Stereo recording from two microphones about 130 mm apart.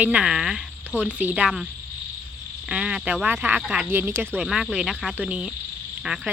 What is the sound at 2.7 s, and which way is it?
Speech, 5° right (ahead or behind).